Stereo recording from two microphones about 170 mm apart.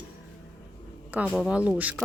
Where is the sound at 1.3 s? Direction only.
5° right (ahead or behind).